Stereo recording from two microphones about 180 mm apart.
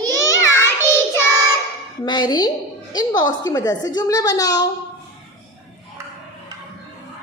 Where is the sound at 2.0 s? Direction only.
25° left (ahead or behind).